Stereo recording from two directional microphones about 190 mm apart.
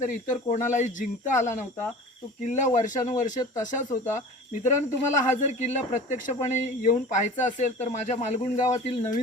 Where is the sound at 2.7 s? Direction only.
40° left (ahead or behind).